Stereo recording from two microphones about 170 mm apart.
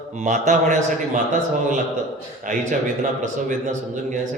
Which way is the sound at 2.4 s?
45° right (ahead or behind).